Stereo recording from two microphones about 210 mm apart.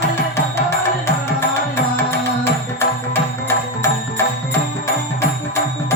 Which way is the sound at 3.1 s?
10° left (ahead or behind).